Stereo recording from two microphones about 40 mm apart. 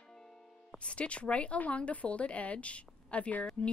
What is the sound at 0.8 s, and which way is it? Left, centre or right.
A woman's voice, left.